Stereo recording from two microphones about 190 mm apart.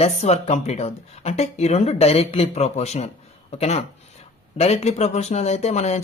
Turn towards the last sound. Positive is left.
turn(degrees=35)  # may be behind; listen again after turning